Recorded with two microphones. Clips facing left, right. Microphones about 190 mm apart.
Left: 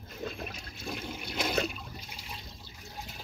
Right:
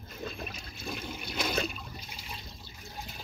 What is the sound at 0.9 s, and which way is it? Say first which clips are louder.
Toilet flush: left 1 dB; 20° left (ahead or behind).